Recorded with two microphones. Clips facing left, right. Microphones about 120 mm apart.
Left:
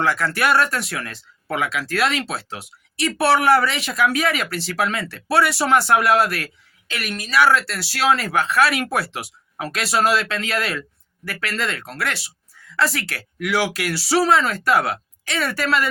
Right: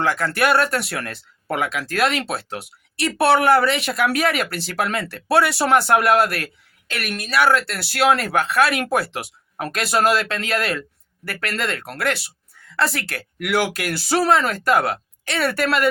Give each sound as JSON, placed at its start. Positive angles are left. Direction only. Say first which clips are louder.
{"t": 0.0, "sound": "speech", "louder": "right 1 dB", "side_deg": -45}